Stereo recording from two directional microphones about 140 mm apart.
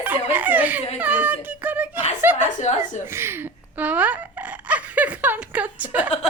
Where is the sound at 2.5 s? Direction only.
60° left (ahead or behind).